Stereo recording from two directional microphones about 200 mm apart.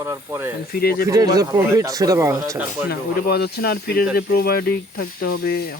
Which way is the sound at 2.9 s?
50° left (ahead or behind).